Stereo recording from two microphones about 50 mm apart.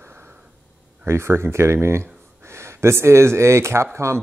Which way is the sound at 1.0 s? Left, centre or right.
Right.